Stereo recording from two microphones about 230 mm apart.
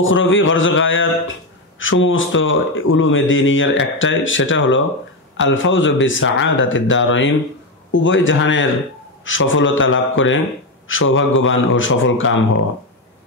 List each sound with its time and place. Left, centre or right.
0.0 s a man's voice: left